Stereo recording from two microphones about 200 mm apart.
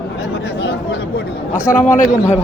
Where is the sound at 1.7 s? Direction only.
40° left (ahead or behind).